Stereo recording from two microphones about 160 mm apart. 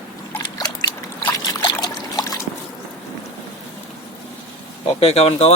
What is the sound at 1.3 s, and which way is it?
Trickle, 25° left (ahead or behind).